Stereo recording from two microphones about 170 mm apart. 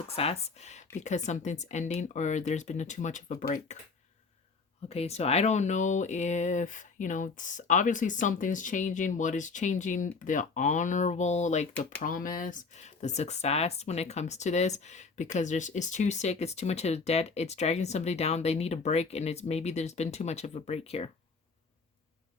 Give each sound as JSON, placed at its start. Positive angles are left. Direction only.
{"t": 0.2, "sound": "speech", "side_deg": 35}
{"t": 4.9, "sound": "speech", "side_deg": 40}